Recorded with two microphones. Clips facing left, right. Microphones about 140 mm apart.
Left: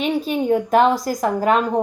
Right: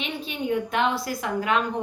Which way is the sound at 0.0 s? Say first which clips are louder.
Left 10 dB; 40° left (ahead or behind).